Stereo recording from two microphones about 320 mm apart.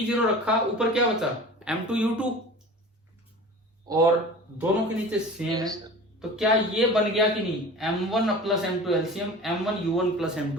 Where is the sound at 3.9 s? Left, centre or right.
Centre.